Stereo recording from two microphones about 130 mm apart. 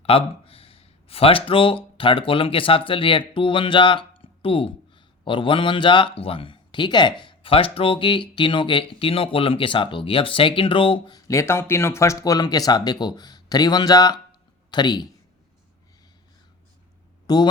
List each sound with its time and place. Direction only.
0.0 s speech: 45° left (ahead or behind)
11.3 s a man's voice: 20° left (ahead or behind)
17.2 s speech: 30° left (ahead or behind)